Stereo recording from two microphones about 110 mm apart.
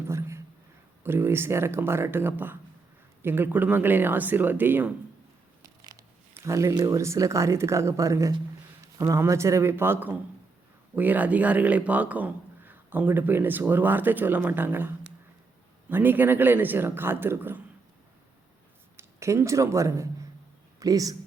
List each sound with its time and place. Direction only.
0.1 s a sound: 25° right (ahead or behind)
1.0 s speech: 20° right (ahead or behind)
6.3 s speech: 25° right (ahead or behind)
18.9 s speech: 25° right (ahead or behind)